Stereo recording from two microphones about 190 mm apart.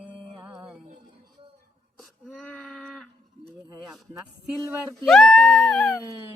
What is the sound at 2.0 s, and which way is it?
Wail, 5° left (ahead or behind).